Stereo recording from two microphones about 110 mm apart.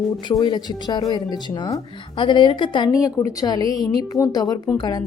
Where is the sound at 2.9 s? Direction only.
30° left (ahead or behind).